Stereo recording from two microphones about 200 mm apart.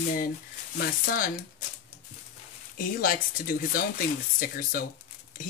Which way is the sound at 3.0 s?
45° left (ahead or behind).